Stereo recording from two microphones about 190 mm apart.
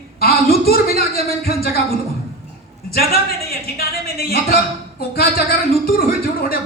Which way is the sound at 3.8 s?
55° left (ahead or behind).